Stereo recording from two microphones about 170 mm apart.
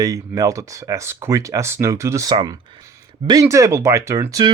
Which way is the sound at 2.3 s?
30° right (ahead or behind).